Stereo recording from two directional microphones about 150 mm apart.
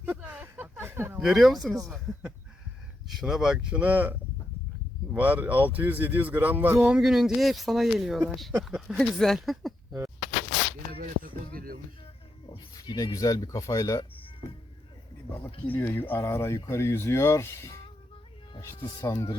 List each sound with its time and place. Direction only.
0.0 s a sound: 10° right (ahead or behind)
1.2 s a man's voice: centre (ahead or behind)
11.0 s a sound: 70° right (ahead or behind)
11.5 s music: 75° right (ahead or behind)
12.7 s speech: 25° left (ahead or behind)
15.6 s speech: 15° left (ahead or behind)